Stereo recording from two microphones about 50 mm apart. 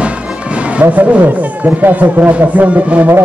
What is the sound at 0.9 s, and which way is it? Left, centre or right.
Speech, right.